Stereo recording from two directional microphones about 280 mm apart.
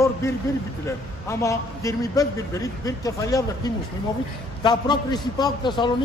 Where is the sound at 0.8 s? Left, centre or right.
Centre.